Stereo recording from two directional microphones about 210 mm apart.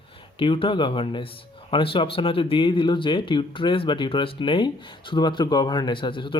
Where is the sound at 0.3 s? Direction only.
25° left (ahead or behind).